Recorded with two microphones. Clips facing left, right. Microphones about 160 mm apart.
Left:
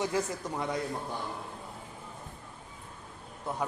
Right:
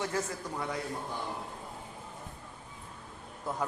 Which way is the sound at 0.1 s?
15° left (ahead or behind).